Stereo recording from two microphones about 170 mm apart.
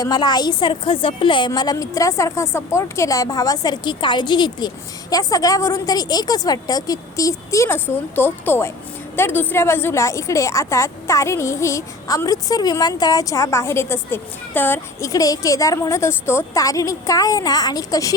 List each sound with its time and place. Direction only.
0.0 s a woman's voice: 25° left (ahead or behind)